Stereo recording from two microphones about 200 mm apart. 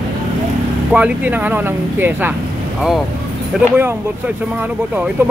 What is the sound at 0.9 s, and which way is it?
Speech, 5° right (ahead or behind).